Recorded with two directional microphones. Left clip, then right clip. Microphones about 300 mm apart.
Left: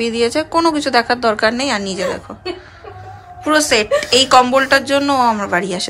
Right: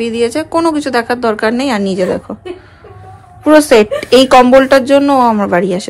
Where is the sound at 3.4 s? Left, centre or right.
Centre.